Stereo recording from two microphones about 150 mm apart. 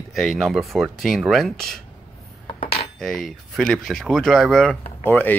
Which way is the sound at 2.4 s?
40° left (ahead or behind).